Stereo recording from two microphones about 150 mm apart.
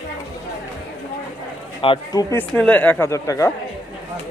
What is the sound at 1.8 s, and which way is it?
Speech, 35° left (ahead or behind).